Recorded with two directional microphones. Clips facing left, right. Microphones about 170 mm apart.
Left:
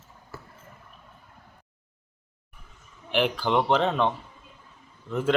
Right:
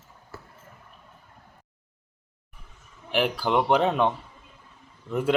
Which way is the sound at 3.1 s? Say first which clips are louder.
Even; 5° right (ahead or behind).